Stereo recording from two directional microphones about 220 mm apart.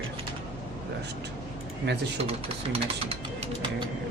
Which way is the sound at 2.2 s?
25° right (ahead or behind).